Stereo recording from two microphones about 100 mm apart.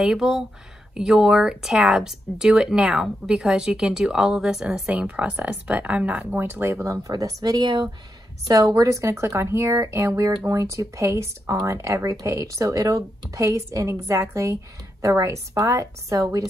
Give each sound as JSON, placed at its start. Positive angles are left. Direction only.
{"t": 0.0, "sound": "speech", "side_deg": -5}